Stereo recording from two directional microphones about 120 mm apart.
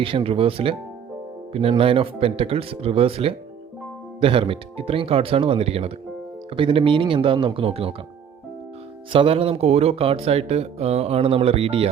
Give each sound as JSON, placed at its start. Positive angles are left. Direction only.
{"t": 0.0, "sound": "speech", "side_deg": -50}
{"t": 1.8, "sound": "speech", "side_deg": -50}
{"t": 9.1, "sound": "speech", "side_deg": -50}